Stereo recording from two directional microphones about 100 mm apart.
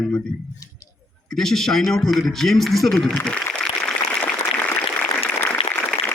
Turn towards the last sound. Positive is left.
turn(degrees=20)  # may be behind; listen again after turning